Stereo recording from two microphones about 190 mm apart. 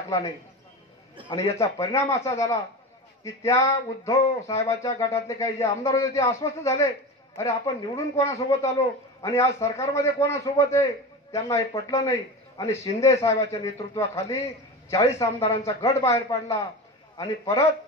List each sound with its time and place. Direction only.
1.6 s a man's voice: 15° left (ahead or behind)